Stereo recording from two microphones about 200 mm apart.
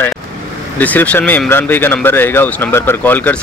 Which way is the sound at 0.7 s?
10° left (ahead or behind).